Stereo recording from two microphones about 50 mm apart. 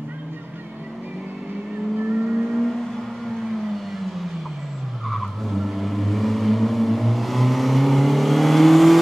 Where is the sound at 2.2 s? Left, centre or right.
Centre.